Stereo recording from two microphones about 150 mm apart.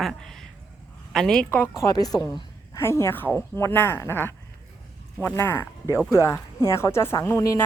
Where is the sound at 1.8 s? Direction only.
25° left (ahead or behind).